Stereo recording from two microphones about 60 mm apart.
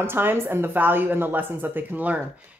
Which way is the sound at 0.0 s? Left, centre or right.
Right.